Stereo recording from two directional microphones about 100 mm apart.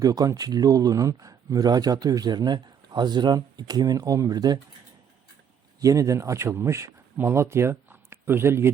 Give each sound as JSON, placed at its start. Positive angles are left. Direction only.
{"t": 0.0, "sound": "speech", "side_deg": -40}
{"t": 5.8, "sound": "speech", "side_deg": -35}